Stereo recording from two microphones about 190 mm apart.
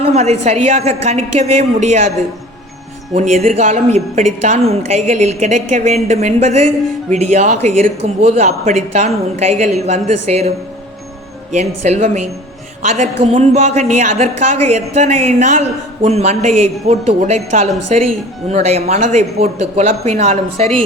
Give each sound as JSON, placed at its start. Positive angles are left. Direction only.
{"t": 0.0, "sound": "a woman's voice", "side_deg": -35}
{"t": 3.2, "sound": "a woman's voice", "side_deg": -35}
{"t": 11.5, "sound": "a woman's voice", "side_deg": -35}